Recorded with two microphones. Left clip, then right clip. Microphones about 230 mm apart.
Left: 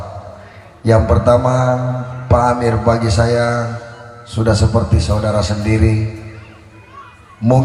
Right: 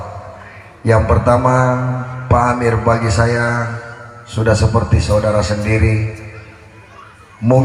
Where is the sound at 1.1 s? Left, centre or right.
Left.